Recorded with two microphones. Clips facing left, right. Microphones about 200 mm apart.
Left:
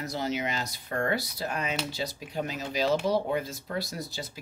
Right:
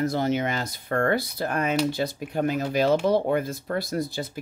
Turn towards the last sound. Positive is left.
turn(degrees=-55)  # may be behind; listen again after turning